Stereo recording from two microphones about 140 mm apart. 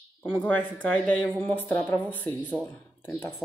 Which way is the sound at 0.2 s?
10° left (ahead or behind).